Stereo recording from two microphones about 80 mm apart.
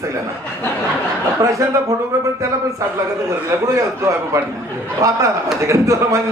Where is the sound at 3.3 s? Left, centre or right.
Right.